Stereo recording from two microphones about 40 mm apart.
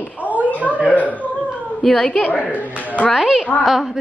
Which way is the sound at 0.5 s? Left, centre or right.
Right.